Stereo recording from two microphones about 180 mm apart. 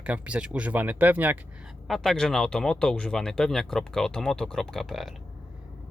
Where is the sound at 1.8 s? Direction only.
Centre (ahead or behind).